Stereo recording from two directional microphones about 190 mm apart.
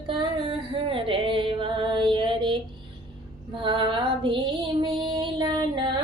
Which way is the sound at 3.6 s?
25° right (ahead or behind).